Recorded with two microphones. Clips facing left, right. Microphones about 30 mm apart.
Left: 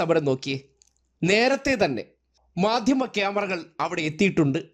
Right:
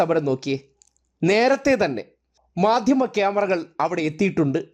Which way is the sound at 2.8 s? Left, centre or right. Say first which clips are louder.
Right 4 dB; left.